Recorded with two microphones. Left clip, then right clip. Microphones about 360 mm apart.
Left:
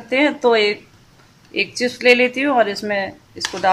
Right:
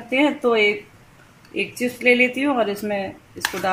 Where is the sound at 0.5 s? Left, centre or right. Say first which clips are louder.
Left 3 dB; left.